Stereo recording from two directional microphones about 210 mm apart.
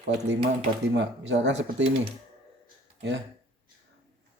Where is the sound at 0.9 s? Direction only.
55° right (ahead or behind).